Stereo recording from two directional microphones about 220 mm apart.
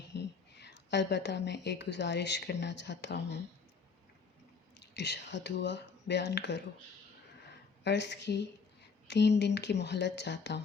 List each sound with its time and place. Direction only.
0.1 s speech: 50° left (ahead or behind)
4.9 s speech: 50° left (ahead or behind)
7.9 s speech: 50° left (ahead or behind)